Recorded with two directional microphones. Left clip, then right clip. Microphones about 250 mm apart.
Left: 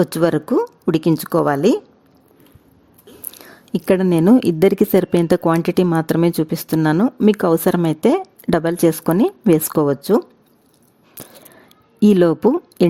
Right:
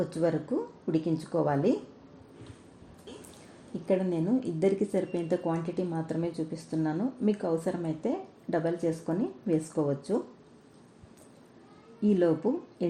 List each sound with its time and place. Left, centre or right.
0.0 s speech: left
3.8 s speech: left
11.2 s a sound: left
12.0 s speech: left